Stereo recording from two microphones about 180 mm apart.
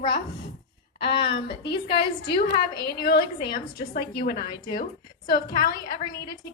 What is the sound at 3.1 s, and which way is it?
A woman's voice, 60° left (ahead or behind).